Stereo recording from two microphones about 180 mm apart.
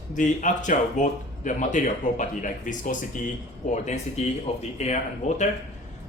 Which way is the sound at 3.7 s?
40° left (ahead or behind).